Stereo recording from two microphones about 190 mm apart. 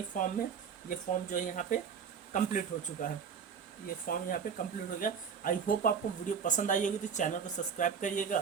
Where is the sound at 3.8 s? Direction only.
50° left (ahead or behind).